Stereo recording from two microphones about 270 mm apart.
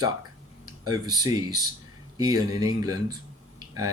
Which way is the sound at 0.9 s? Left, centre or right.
Centre.